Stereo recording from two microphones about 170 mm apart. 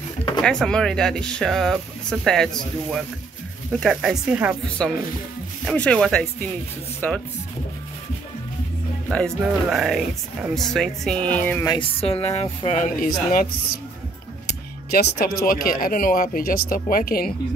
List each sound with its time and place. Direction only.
0.4 s speech: 5° left (ahead or behind)
4.8 s speech: 5° left (ahead or behind)
9.1 s speech: centre (ahead or behind)
12.0 s a woman's voice: 35° left (ahead or behind); by 13.5 s 55° left (ahead or behind)
14.4 s speech: 70° left (ahead or behind)